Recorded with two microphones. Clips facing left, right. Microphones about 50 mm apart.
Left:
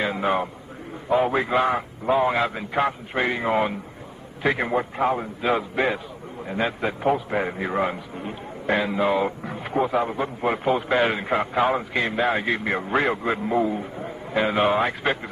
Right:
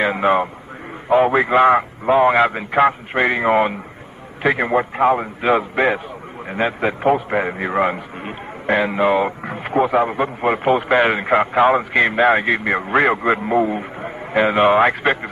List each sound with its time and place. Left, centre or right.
0.0 s a man's voice: right
1.7 s a man's voice: right
4.4 s a man's voice: right
6.4 s a man's voice: right
8.6 s a man's voice: right